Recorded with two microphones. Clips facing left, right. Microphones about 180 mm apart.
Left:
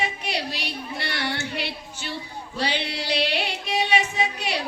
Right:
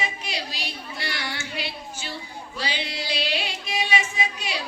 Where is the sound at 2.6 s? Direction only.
60° left (ahead or behind).